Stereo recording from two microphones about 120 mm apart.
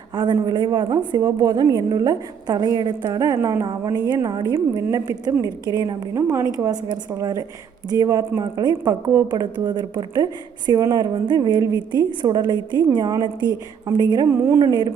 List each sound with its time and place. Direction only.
0.1 s a woman's voice: 40° right (ahead or behind)
6.1 s a woman's voice: 25° right (ahead or behind)